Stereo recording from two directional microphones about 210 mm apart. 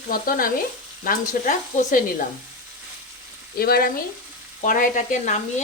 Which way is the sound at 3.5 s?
45° left (ahead or behind).